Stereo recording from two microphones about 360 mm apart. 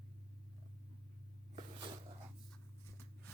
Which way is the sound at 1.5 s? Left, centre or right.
Centre.